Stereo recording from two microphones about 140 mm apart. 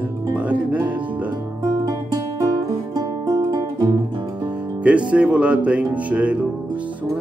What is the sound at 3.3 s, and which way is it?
Music, 25° right (ahead or behind).